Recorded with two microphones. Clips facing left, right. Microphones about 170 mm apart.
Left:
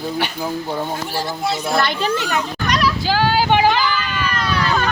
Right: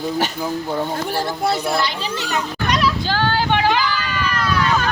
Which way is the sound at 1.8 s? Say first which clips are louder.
Left 4 dB; 55° left (ahead or behind).